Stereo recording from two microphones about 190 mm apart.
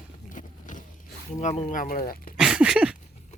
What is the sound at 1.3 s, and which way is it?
Speech, 35° left (ahead or behind).